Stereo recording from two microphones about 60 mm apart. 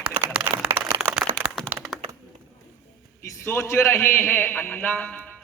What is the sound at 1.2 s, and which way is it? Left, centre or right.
Crack, right.